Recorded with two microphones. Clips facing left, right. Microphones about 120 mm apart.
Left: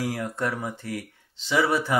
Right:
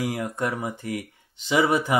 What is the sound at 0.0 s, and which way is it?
Speech, 15° right (ahead or behind).